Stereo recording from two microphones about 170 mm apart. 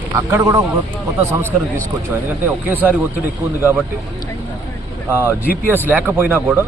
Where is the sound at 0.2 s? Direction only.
15° right (ahead or behind).